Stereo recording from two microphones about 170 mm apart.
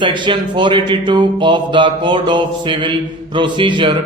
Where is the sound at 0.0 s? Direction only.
30° right (ahead or behind).